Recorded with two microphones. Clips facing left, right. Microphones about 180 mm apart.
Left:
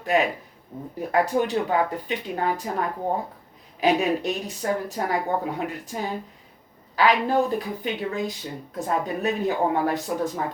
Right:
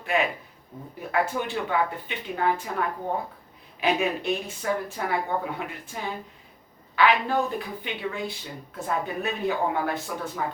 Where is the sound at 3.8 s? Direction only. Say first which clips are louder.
Left 4 dB; 40° left (ahead or behind).